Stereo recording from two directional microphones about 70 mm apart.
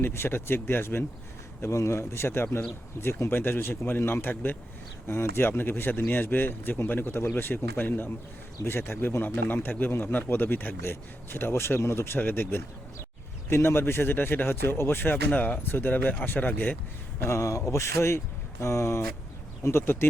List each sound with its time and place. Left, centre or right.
0.0 s speech: left
1.6 s speech: left
17.2 s speech: left